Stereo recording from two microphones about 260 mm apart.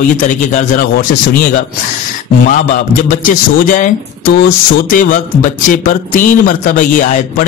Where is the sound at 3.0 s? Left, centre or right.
Left.